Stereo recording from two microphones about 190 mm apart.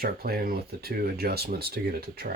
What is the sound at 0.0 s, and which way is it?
Speech, 50° right (ahead or behind).